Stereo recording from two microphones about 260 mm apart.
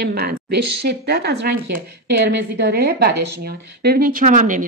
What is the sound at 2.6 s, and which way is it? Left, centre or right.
Speech, right.